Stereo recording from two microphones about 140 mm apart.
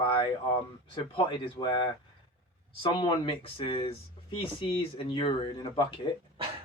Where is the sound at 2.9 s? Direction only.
35° left (ahead or behind).